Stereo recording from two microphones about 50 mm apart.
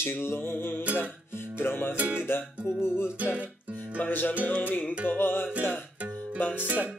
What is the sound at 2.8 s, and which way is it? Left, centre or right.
Music, left.